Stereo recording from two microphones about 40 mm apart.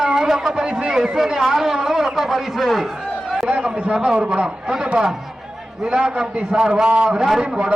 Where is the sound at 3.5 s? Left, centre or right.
Right.